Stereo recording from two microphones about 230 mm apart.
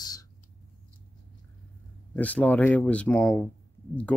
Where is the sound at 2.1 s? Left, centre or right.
Centre.